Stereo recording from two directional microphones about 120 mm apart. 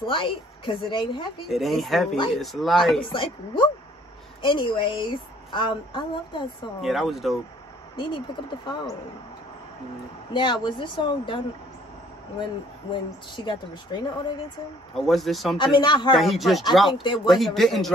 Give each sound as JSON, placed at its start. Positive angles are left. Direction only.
{"t": 0.0, "sound": "a woman's voice", "side_deg": 45}
{"t": 1.5, "sound": "a man's voice", "side_deg": 0}
{"t": 3.0, "sound": "a woman's voice", "side_deg": 45}
{"t": 6.8, "sound": "a man's voice", "side_deg": 0}
{"t": 7.9, "sound": "speech", "side_deg": 40}
{"t": 10.3, "sound": "speech", "side_deg": 40}
{"t": 13.5, "sound": "speech", "side_deg": 40}
{"t": 15.0, "sound": "a man's voice", "side_deg": 0}
{"t": 15.5, "sound": "speech", "side_deg": 40}
{"t": 16.2, "sound": "a man's voice", "side_deg": 0}
{"t": 17.0, "sound": "speech", "side_deg": 40}
{"t": 17.3, "sound": "a man's voice", "side_deg": 0}